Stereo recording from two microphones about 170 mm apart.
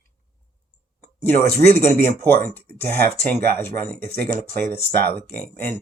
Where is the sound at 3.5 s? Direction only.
10° left (ahead or behind).